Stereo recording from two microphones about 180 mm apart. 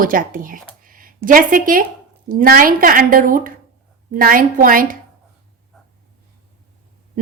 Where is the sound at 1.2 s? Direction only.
50° right (ahead or behind).